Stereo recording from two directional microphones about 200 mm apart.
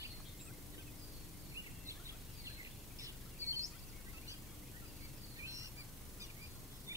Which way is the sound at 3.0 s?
15° right (ahead or behind).